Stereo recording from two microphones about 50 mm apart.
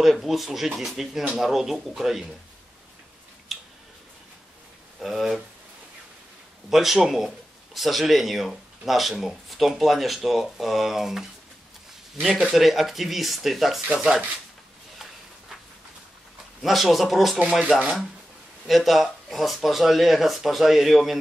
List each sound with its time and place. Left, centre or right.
0.0 s speech: centre
3.5 s a sound: centre
5.0 s speech: centre
6.7 s speech: centre
12.4 s speech: centre
16.6 s speech: centre
17.4 s speech: centre
18.7 s speech: centre